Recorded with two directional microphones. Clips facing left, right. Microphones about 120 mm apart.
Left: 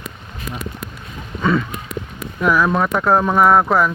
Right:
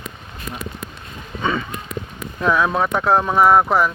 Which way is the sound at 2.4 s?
25° right (ahead or behind).